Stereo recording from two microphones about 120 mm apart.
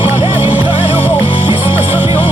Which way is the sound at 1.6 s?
15° right (ahead or behind).